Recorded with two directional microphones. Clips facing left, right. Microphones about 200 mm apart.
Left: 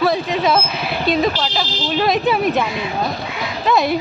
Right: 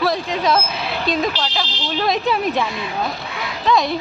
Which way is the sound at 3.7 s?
10° left (ahead or behind).